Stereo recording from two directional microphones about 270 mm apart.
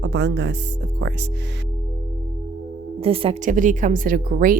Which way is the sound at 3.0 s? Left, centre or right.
Right.